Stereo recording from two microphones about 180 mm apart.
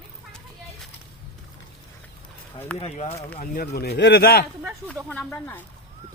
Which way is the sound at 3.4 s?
55° left (ahead or behind).